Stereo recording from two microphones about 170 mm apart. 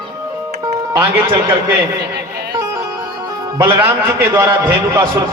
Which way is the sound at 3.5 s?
15° right (ahead or behind).